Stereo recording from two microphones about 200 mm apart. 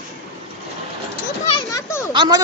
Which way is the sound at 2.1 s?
25° right (ahead or behind).